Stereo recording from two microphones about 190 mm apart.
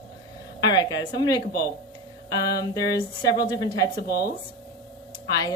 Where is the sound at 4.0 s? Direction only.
60° left (ahead or behind).